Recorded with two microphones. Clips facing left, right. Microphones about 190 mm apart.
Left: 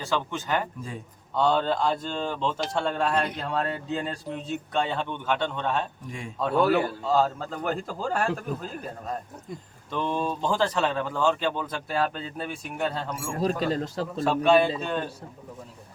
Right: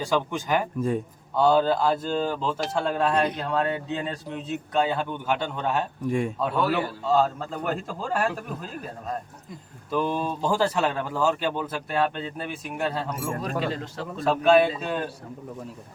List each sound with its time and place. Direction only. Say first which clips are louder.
0.0 s speech: right 3 dB; 10° right (ahead or behind)
6.1 s speech: right 12 dB; 55° right (ahead or behind)
6.4 s speech: left 8 dB; centre (ahead or behind)
9.9 s speech: right 2 dB; 5° right (ahead or behind)
13.4 s speech: left 8 dB; 35° left (ahead or behind)
14.3 s speech: right 2 dB; centre (ahead or behind)